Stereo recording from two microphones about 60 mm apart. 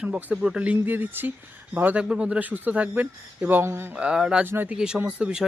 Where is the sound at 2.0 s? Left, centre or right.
Centre; by 3.9 s right.